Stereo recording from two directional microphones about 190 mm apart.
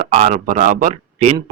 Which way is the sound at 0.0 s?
40° right (ahead or behind).